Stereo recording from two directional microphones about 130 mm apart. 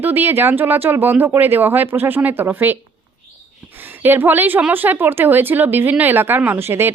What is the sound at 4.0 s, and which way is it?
A woman's voice, 15° right (ahead or behind).